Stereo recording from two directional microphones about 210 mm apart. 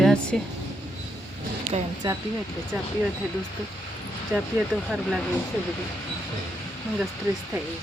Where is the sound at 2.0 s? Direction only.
20° right (ahead or behind).